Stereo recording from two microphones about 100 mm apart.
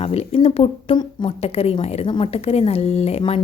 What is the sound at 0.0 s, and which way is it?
Speech, 80° left.